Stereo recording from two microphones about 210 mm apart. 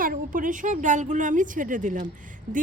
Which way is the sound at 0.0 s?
40° right (ahead or behind).